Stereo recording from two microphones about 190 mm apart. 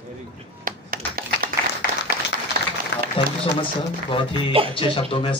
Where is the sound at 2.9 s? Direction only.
60° left (ahead or behind).